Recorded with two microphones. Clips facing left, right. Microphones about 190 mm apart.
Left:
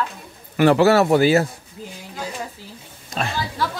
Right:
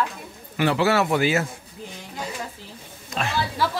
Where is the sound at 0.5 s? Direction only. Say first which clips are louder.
Left 6 dB; 50° left (ahead or behind).